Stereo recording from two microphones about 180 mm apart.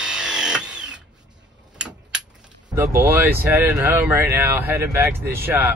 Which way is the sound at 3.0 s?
10° right (ahead or behind).